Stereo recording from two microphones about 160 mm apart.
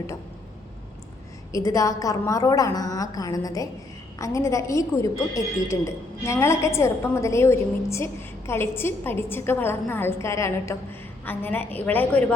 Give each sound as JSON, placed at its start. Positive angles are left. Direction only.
{"t": 1.5, "sound": "a woman's voice", "side_deg": 20}